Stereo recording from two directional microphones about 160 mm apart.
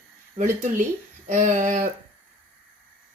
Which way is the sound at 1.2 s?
50° right (ahead or behind).